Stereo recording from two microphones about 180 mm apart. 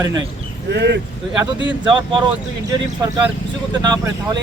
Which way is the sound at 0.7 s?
70° right (ahead or behind).